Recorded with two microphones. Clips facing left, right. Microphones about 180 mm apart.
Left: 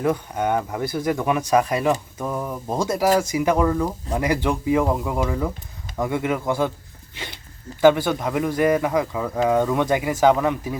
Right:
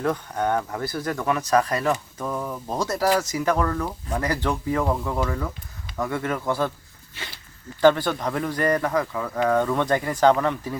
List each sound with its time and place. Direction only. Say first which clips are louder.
0.0 s speech: left 2 dB; 10° left (ahead or behind)
7.8 s speech: left 2 dB; 10° left (ahead or behind)